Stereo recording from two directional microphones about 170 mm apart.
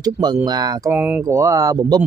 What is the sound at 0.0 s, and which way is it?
Speech, 25° right (ahead or behind).